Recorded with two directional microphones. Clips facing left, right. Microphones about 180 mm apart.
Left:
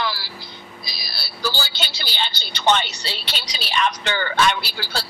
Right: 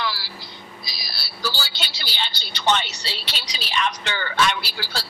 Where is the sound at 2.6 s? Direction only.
55° left (ahead or behind).